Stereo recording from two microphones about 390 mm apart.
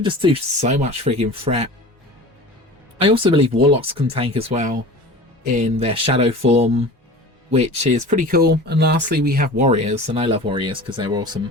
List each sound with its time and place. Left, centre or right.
0.0 s speech: centre
3.0 s speech: centre